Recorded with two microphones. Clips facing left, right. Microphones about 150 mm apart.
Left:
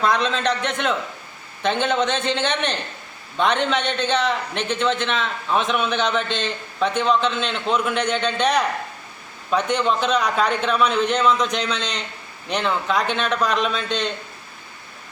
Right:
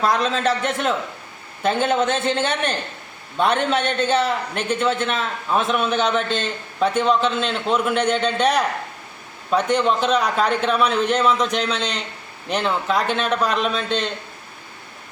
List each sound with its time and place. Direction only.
0.0 s a man's voice: 5° right (ahead or behind)